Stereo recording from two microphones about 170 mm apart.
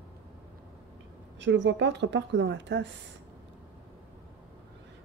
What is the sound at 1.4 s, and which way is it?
Speech, 90° right.